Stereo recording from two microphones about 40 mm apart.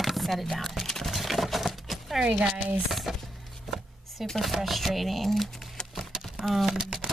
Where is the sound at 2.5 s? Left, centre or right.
Right.